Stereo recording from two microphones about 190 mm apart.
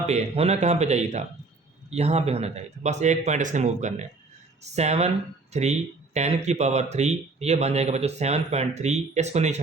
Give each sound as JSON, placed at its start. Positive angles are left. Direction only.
{"t": 0.0, "sound": "speech", "side_deg": -35}